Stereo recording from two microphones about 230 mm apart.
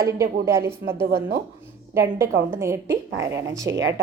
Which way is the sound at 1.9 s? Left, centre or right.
Centre.